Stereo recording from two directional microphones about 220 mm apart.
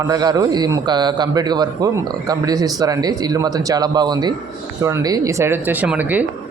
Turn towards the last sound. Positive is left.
turn(degrees=-5)  # may be behind; listen again after turning